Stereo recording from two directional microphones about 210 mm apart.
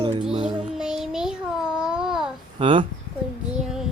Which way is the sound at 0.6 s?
5° right (ahead or behind).